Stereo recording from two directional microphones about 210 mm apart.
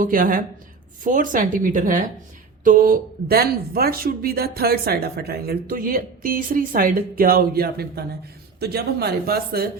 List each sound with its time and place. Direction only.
0.0 s speech: 40° right (ahead or behind)